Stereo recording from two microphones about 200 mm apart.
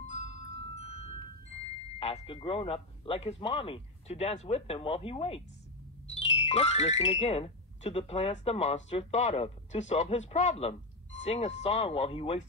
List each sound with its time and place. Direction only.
0.0 s music: 35° left (ahead or behind)
2.0 s speech: 30° left (ahead or behind)